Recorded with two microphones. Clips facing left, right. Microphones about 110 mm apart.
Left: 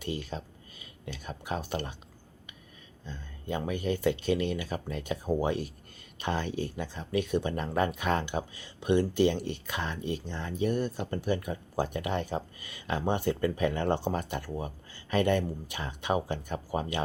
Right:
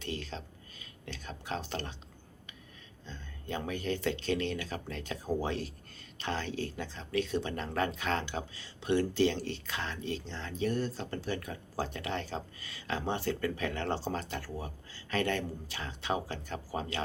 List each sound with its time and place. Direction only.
0.0 s speech: 10° left (ahead or behind)
3.0 s speech: 10° left (ahead or behind)